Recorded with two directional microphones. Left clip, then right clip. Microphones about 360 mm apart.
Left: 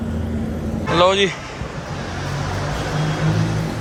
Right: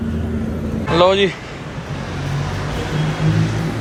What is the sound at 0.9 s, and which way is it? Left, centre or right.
Speech, centre.